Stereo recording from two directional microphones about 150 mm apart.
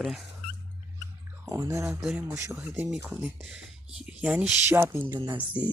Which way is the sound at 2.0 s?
Centre (ahead or behind).